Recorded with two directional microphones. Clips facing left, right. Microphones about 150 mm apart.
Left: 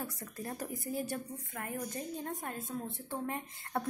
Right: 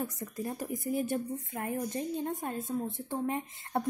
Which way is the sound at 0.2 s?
15° right (ahead or behind).